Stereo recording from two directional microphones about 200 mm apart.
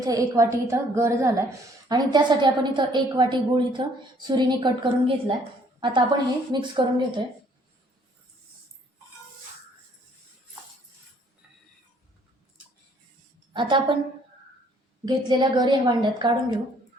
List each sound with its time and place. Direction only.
0.0 s a woman's voice: 15° right (ahead or behind)
13.5 s a woman's voice: 25° right (ahead or behind)
15.0 s a woman's voice: 20° right (ahead or behind)